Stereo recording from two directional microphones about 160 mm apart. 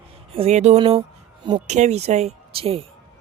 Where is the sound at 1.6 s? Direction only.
45° right (ahead or behind).